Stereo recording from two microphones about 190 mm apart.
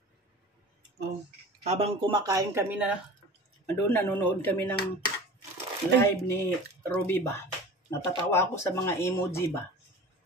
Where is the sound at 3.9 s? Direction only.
10° left (ahead or behind).